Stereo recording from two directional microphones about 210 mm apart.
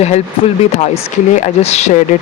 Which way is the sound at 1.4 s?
30° left (ahead or behind).